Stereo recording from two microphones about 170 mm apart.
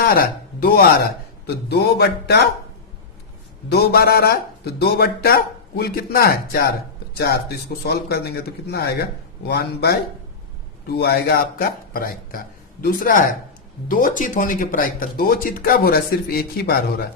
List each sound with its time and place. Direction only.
0.0 s speech: 60° left (ahead or behind)
1.7 s speech: 75° left (ahead or behind)
3.7 s speech: 70° left (ahead or behind)